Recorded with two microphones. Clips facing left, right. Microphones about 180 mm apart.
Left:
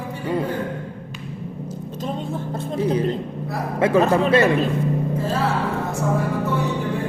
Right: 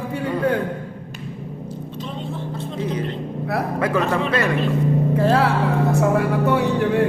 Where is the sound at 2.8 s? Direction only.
30° left (ahead or behind).